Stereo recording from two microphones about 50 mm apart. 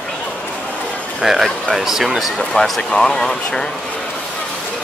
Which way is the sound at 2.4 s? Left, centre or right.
Centre.